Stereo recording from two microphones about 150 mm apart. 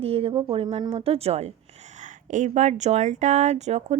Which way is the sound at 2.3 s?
55° right (ahead or behind).